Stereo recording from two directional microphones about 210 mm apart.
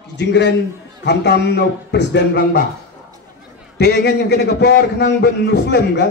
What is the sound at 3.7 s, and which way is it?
A man's voice, 55° left (ahead or behind).